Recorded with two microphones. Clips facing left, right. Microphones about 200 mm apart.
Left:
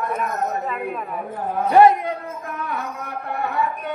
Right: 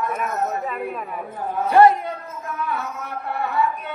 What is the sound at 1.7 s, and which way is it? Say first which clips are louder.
Speech: left 1 dB; 15° left (ahead or behind).